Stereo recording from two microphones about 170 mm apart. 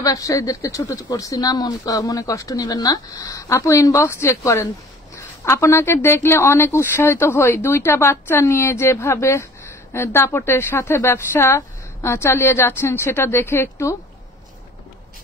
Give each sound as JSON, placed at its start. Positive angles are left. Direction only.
{"t": 0.0, "sound": "a woman's voice", "side_deg": 20}